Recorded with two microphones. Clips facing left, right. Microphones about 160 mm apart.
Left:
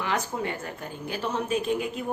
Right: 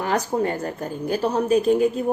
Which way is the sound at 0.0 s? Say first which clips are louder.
Right 7 dB; 40° right (ahead or behind).